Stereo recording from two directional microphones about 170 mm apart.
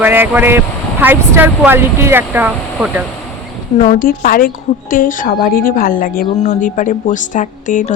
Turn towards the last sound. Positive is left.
turn(degrees=50)  # may be behind; listen again after turning